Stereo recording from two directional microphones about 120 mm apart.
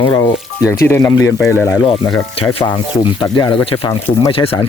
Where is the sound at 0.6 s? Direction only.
20° left (ahead or behind).